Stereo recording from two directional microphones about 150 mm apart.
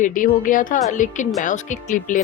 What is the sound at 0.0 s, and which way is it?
Speech, 60° left (ahead or behind).